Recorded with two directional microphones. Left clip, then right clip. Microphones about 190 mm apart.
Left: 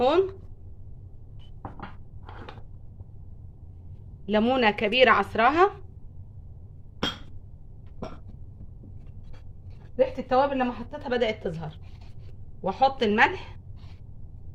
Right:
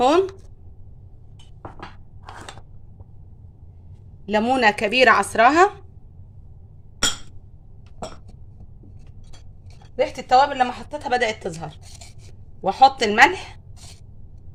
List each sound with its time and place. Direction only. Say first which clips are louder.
0.0 s speech: right 5 dB; 50° right (ahead or behind)
4.3 s speech: right 5 dB; 35° right (ahead or behind)
9.9 s a woman's voice: right 6 dB; 65° right (ahead or behind)